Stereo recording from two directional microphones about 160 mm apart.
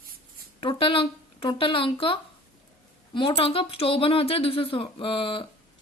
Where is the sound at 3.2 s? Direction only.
35° left (ahead or behind).